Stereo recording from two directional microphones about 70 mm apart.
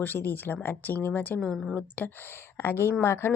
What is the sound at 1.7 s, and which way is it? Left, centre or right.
Speech, left.